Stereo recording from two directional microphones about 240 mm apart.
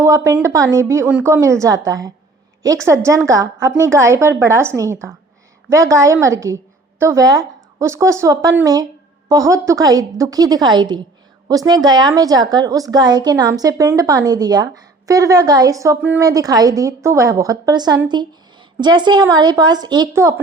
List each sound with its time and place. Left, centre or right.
0.0 s a woman's voice: centre